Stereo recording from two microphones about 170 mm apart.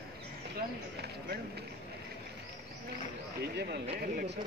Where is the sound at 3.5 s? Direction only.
75° right (ahead or behind).